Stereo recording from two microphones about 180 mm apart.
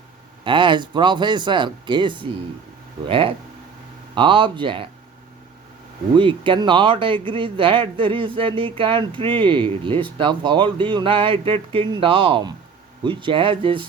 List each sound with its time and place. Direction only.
0.4 s speech: 25° right (ahead or behind)
6.1 s speech: 30° right (ahead or behind)